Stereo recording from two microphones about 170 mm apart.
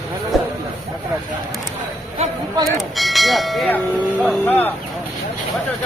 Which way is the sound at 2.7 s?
Centre (ahead or behind).